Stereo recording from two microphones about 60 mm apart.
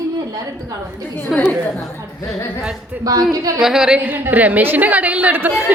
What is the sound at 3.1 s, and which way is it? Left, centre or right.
Speech, right.